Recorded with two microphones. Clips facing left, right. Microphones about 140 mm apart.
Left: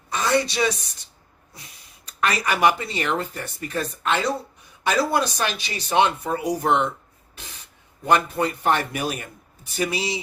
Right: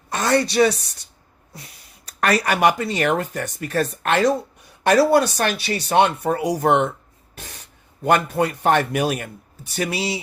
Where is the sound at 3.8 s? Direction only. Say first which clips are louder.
Right 4 dB; 60° right (ahead or behind).